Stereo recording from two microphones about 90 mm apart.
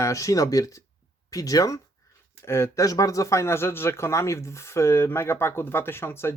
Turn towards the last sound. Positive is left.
turn(degrees=25)  # may be behind; listen again after turning